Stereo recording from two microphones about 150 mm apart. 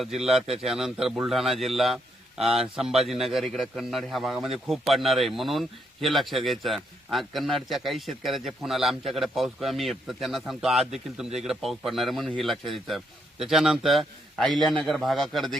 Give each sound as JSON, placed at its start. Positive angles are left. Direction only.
{"t": 0.0, "sound": "a man's voice", "side_deg": 0}